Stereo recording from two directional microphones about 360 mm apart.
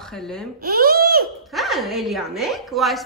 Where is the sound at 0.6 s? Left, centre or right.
Right.